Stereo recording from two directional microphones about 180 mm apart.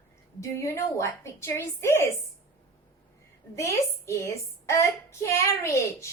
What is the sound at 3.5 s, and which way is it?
A woman's voice, 15° left (ahead or behind).